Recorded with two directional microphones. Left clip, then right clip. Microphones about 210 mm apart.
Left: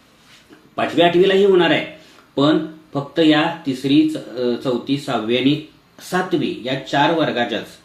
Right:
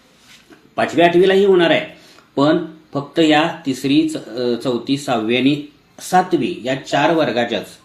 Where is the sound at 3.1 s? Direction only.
25° right (ahead or behind).